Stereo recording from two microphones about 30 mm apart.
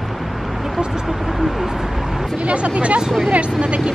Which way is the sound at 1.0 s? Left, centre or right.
Centre.